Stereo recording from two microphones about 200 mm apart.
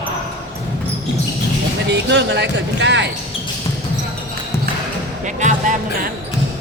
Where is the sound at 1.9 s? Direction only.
60° right (ahead or behind).